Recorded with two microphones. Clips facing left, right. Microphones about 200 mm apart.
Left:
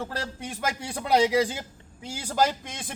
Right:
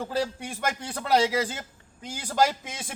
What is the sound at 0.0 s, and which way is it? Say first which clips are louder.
A man's voice: right 4 dB; centre (ahead or behind).